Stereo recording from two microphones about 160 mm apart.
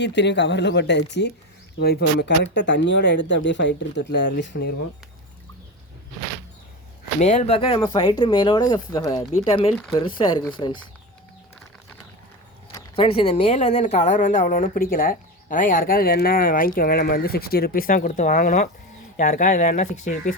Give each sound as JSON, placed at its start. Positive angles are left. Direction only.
{"t": 0.0, "sound": "speech", "side_deg": 90}
{"t": 7.2, "sound": "speech", "side_deg": 45}
{"t": 9.4, "sound": "speech", "side_deg": 35}
{"t": 12.7, "sound": "speech", "side_deg": 35}